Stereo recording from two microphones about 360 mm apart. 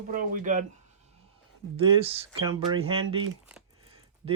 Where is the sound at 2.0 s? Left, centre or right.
Centre.